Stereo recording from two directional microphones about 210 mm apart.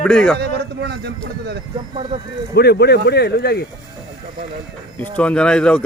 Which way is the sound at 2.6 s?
50° left (ahead or behind).